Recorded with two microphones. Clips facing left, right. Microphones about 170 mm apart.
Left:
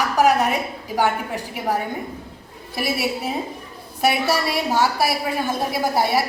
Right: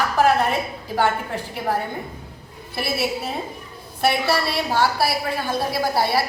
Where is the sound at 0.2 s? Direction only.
15° left (ahead or behind).